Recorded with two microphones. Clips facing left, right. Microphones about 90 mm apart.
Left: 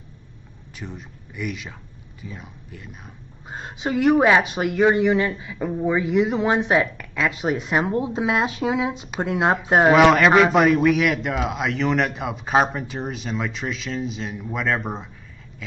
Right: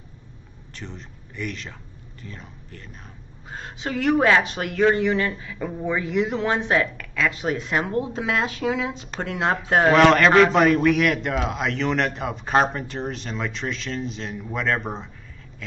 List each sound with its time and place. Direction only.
0.7 s speech: 10° left (ahead or behind)
3.4 s speech: 20° left (ahead or behind)
9.9 s speech: 5° left (ahead or behind)